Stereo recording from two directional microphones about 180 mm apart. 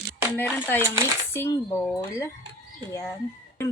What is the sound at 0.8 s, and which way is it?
Speech, 15° right (ahead or behind).